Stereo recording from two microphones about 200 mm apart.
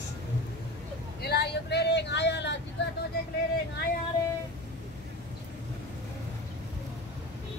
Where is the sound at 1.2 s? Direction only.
55° left (ahead or behind).